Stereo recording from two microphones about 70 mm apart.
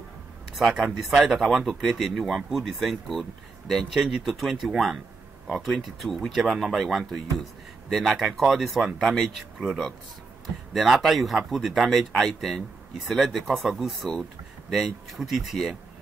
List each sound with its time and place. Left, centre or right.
0.6 s speech: centre
10.7 s speech: centre